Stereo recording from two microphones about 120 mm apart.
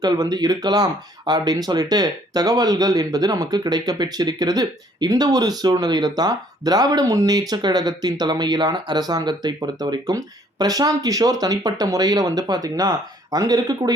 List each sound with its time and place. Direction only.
0.0 s speech: 35° right (ahead or behind)